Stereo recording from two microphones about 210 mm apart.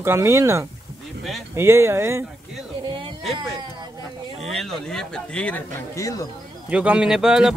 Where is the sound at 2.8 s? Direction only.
25° right (ahead or behind).